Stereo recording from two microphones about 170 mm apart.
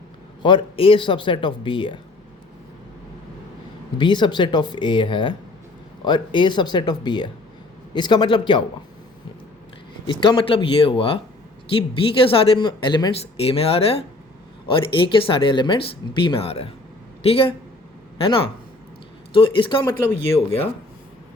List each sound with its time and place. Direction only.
0.4 s speech: 30° left (ahead or behind)
3.9 s speech: 25° left (ahead or behind)
10.1 s speech: 30° left (ahead or behind)
19.8 s speech: 15° left (ahead or behind)